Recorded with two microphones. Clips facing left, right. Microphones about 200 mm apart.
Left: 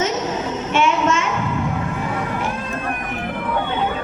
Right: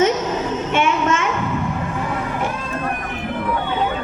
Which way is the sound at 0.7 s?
55° right (ahead or behind).